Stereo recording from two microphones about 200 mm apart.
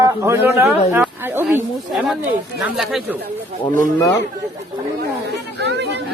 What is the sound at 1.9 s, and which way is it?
Speech, centre (ahead or behind).